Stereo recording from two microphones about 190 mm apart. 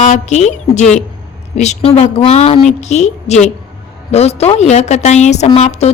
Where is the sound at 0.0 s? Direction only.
35° left (ahead or behind).